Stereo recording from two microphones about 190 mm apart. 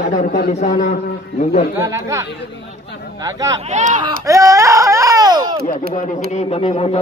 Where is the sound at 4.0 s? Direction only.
20° right (ahead or behind).